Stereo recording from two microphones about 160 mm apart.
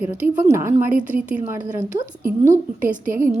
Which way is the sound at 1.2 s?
10° right (ahead or behind).